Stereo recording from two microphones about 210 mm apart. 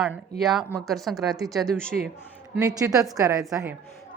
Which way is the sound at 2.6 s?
15° right (ahead or behind).